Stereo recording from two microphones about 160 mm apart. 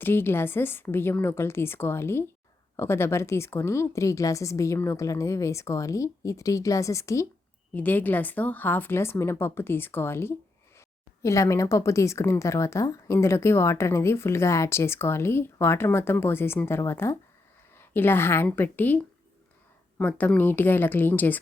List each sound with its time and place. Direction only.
0.0 s a woman's voice: 15° left (ahead or behind)
20.0 s a woman's voice: 10° left (ahead or behind)